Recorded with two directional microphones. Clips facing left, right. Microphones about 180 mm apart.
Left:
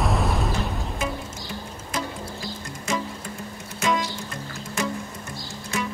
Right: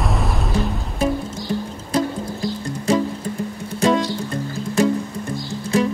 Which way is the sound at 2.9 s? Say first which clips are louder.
Right 9 dB; 35° right (ahead or behind).